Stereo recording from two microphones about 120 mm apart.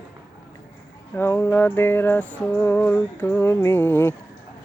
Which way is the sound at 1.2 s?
20° left (ahead or behind).